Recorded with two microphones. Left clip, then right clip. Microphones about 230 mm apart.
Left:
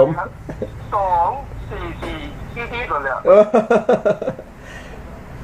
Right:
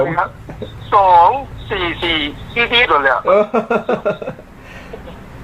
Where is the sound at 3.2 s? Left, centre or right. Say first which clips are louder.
Left 2 dB; centre.